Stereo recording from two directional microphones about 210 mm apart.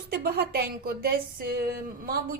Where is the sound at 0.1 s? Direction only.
50° right (ahead or behind).